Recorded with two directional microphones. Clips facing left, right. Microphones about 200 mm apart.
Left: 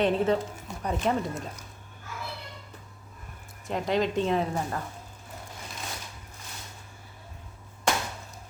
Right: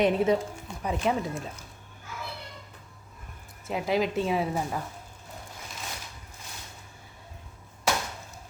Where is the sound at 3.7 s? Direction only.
5° right (ahead or behind).